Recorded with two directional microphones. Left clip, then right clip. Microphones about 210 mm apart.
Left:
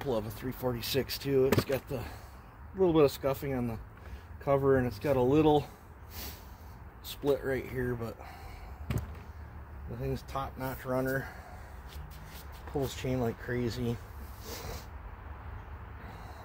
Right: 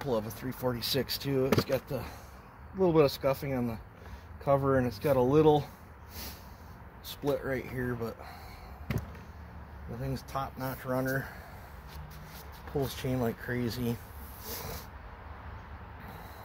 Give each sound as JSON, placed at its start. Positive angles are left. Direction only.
{"t": 0.0, "sound": "speech", "side_deg": -5}
{"t": 7.1, "sound": "speech", "side_deg": -5}
{"t": 10.0, "sound": "speech", "side_deg": -10}
{"t": 12.8, "sound": "speech", "side_deg": -15}
{"t": 14.4, "sound": "a sound", "side_deg": -20}